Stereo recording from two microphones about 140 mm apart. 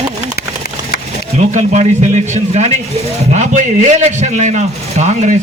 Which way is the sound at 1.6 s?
55° right (ahead or behind).